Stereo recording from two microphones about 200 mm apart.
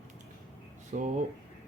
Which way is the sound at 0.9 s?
45° right (ahead or behind).